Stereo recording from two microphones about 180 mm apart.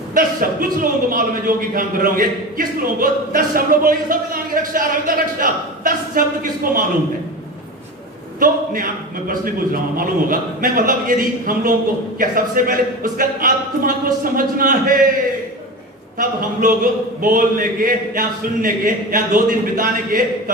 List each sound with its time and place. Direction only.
0.1 s a man's voice: 50° right (ahead or behind)
8.4 s a man's voice: 50° right (ahead or behind)
16.1 s a man's voice: 50° right (ahead or behind)